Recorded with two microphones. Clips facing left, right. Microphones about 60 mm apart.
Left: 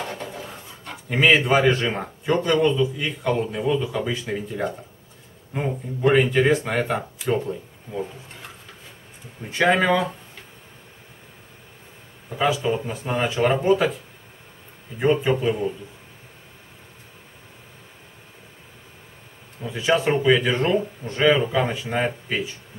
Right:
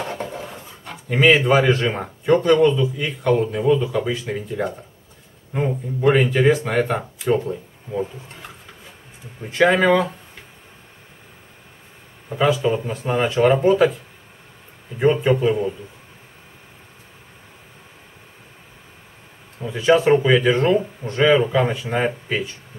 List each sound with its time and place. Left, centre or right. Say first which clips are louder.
0.0 s a sound: right 4 dB; centre
0.5 s a man's voice: right 2 dB; centre
9.5 s speech: right 3 dB; centre
12.4 s speech: right 3 dB; centre
15.0 s speech: right 3 dB; centre
19.6 s speech: right 5 dB; centre